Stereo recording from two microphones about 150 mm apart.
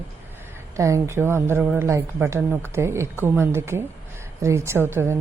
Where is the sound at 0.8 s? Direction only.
20° right (ahead or behind).